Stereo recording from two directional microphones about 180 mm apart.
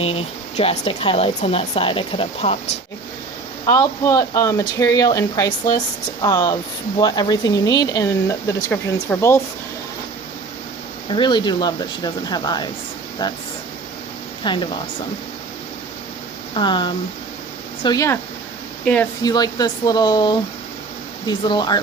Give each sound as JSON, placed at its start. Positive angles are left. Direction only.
{"t": 0.0, "sound": "speech", "side_deg": 35}
{"t": 3.7, "sound": "speech", "side_deg": 20}
{"t": 11.1, "sound": "speech", "side_deg": 25}
{"t": 14.4, "sound": "speech", "side_deg": 25}
{"t": 16.6, "sound": "speech", "side_deg": 25}
{"t": 18.9, "sound": "speech", "side_deg": 5}
{"t": 19.2, "sound": "speech", "side_deg": 20}